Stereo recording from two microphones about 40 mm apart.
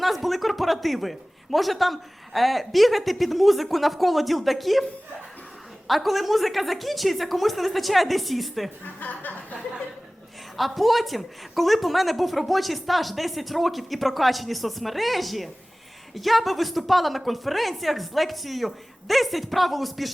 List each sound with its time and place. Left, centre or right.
0.0 s a man's voice: centre
5.9 s a man's voice: centre
9.0 s speech: left
10.6 s a man's voice: centre